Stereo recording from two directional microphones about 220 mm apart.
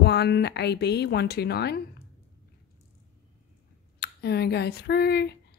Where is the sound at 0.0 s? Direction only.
50° left (ahead or behind).